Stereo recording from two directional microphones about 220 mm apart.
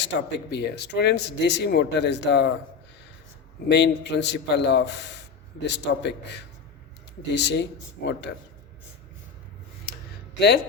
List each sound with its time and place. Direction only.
0.0 s speech: 55° left (ahead or behind)
3.7 s speech: 50° left (ahead or behind)